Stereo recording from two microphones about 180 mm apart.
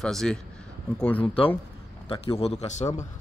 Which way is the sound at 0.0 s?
5° left (ahead or behind).